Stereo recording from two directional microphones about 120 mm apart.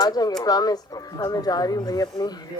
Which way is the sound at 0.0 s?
35° left (ahead or behind).